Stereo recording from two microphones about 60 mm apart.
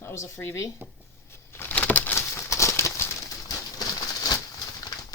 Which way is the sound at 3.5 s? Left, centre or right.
Left.